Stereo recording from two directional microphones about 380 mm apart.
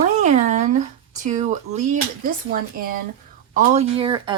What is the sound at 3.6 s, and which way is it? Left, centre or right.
Speech, centre.